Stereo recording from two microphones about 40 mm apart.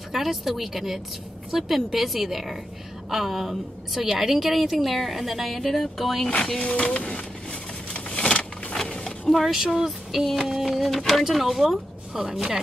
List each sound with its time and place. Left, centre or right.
0.1 s a woman's voice: centre
6.6 s speech: left
7.9 s a sound: left
9.5 s a woman's voice: centre